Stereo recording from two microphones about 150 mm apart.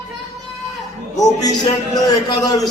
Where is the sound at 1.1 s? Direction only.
25° left (ahead or behind).